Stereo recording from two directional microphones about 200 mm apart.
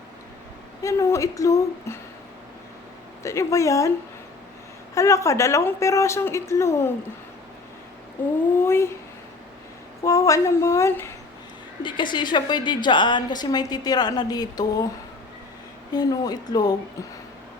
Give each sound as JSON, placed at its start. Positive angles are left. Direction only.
{"t": 0.8, "sound": "a woman's voice", "side_deg": 15}
{"t": 3.2, "sound": "a woman's voice", "side_deg": 15}
{"t": 4.9, "sound": "a woman's voice", "side_deg": 15}
{"t": 8.2, "sound": "a woman's voice", "side_deg": 10}
{"t": 10.1, "sound": "a woman's voice", "side_deg": 15}
{"t": 11.8, "sound": "a woman's voice", "side_deg": 25}
{"t": 15.9, "sound": "a woman's voice", "side_deg": 20}